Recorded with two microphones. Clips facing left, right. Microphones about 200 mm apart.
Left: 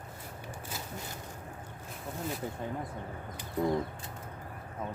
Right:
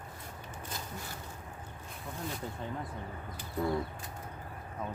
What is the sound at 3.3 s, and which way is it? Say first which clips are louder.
Bird: left 3 dB; 20° left (ahead or behind).